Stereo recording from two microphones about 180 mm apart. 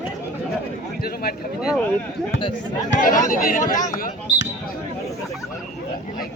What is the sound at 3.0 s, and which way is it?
Speech, 50° left (ahead or behind).